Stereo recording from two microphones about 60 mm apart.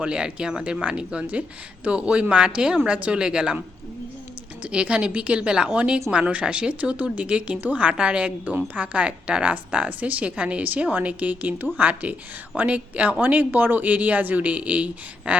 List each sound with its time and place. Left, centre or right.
0.0 s speech: centre
4.6 s speech: centre